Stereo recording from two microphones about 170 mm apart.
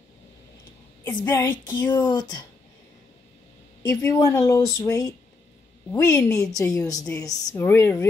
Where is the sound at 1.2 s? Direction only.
15° left (ahead or behind).